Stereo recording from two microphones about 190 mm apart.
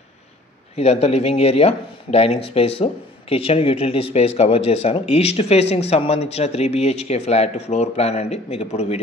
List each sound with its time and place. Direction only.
0.7 s speech: 35° left (ahead or behind)